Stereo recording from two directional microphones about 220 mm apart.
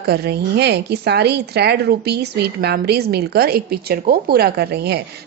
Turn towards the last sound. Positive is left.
turn(degrees=-50)  # may be behind; listen again after turning